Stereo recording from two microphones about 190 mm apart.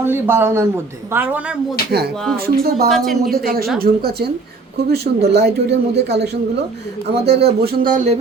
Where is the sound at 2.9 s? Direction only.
Centre (ahead or behind).